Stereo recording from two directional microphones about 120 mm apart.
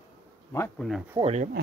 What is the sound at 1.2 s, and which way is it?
Speech, 70° right (ahead or behind).